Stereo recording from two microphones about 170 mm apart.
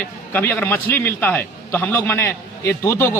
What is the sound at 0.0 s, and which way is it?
A man's voice, 10° left (ahead or behind).